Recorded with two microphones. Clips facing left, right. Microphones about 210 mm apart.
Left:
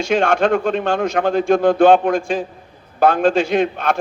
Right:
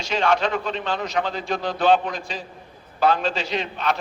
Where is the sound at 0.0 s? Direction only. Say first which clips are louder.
Left 6 dB; 50° left (ahead or behind).